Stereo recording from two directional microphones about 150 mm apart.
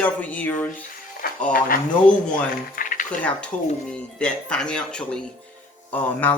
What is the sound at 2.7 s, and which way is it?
Cutlery, 65° left (ahead or behind).